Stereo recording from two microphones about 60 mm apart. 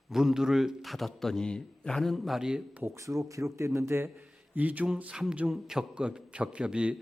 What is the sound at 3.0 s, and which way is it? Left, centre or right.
Speech, right.